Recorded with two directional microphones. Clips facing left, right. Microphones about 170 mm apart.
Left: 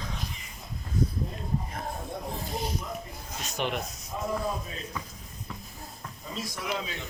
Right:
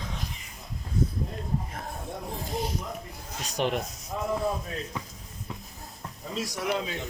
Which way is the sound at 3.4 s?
35° right (ahead or behind).